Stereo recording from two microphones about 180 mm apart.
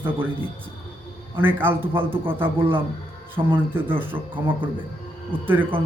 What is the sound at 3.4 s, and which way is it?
Speech, 25° right (ahead or behind).